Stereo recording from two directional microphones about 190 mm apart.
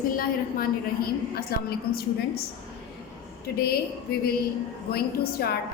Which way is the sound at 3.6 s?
55° left (ahead or behind).